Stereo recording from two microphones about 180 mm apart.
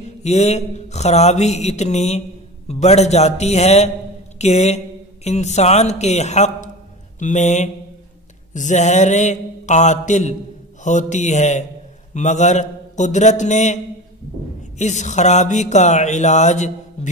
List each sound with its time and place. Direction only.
0.0 s speech: 40° left (ahead or behind)
14.8 s speech: 40° left (ahead or behind)